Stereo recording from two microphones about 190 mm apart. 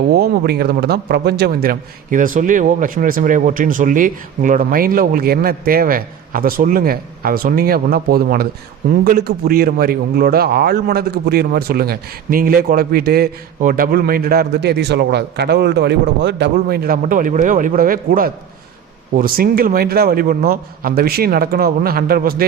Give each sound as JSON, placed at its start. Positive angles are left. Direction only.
{"t": 0.1, "sound": "a man's voice", "side_deg": -55}